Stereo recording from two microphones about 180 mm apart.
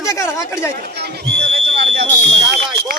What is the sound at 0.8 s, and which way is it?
Speech, 60° right (ahead or behind).